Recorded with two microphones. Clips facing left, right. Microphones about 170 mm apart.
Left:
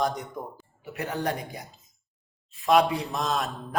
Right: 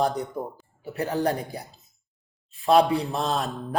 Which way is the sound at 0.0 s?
35° right (ahead or behind).